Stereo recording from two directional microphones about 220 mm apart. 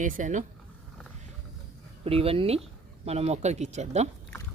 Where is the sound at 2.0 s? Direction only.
25° right (ahead or behind).